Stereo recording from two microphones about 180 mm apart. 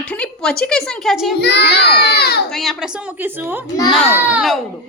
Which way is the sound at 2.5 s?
Centre (ahead or behind).